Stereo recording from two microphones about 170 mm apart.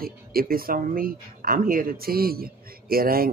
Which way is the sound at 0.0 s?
60° right (ahead or behind).